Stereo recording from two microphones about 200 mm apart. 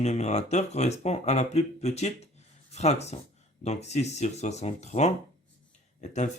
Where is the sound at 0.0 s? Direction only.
35° left (ahead or behind).